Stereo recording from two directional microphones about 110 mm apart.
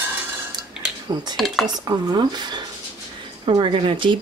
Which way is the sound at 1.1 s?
40° right (ahead or behind).